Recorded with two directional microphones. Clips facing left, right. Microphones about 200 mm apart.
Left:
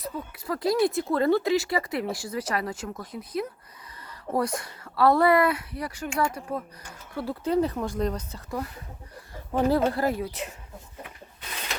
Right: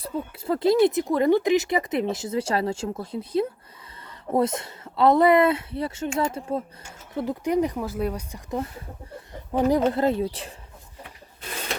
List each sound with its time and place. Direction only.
0.0 s speech: 25° right (ahead or behind)